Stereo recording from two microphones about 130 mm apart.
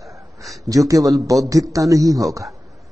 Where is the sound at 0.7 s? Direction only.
25° right (ahead or behind).